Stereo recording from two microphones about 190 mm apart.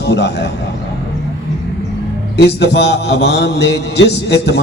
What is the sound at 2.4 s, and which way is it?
A man's voice, 65° left (ahead or behind).